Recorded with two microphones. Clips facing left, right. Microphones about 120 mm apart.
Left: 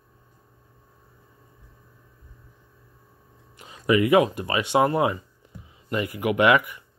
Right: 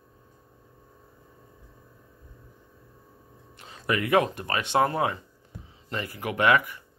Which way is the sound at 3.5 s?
10° left (ahead or behind).